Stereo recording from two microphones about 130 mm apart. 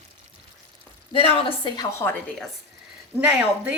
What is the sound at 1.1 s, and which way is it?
Speech, 40° left (ahead or behind).